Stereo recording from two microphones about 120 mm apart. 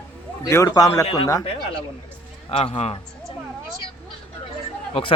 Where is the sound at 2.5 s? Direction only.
55° left (ahead or behind).